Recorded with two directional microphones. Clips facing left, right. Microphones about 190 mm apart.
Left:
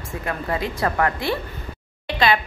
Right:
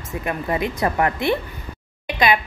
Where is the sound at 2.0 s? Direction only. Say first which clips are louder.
Right 1 dB; 15° right (ahead or behind).